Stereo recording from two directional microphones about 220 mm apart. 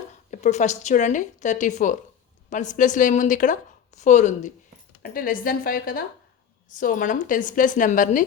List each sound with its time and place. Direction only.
0.3 s a woman's voice: 35° left (ahead or behind)